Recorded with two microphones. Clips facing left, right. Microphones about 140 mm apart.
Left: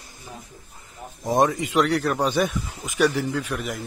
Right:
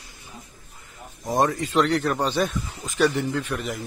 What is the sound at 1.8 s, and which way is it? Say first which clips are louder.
Speech: left 1 dB; centre (ahead or behind).